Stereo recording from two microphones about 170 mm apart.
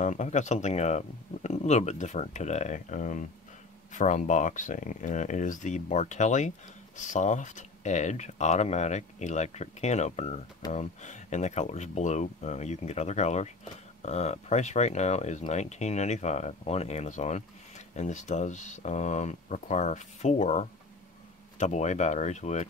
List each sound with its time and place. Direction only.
0.0 s speech: 45° left (ahead or behind)